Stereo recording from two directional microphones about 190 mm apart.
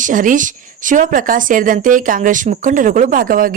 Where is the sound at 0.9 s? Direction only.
45° right (ahead or behind).